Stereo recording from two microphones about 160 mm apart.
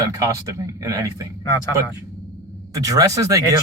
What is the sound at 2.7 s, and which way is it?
Speech, 20° right (ahead or behind).